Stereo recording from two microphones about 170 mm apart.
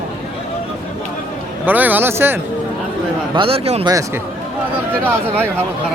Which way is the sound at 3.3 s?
35° right (ahead or behind).